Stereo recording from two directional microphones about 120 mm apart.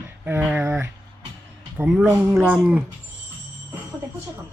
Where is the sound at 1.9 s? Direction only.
10° right (ahead or behind).